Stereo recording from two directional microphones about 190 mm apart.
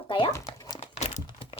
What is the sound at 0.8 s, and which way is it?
Crumpling, 35° left (ahead or behind).